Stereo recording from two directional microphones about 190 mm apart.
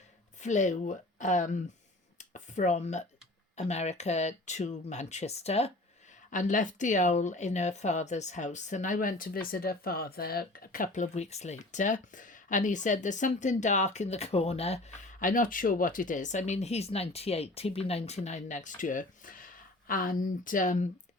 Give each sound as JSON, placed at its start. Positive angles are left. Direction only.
{"t": 0.3, "sound": "speech", "side_deg": 40}
{"t": 2.1, "sound": "a sound", "side_deg": 40}
{"t": 3.5, "sound": "speech", "side_deg": 35}